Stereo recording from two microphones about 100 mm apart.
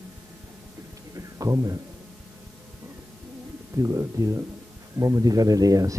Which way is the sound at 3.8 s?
35° right (ahead or behind).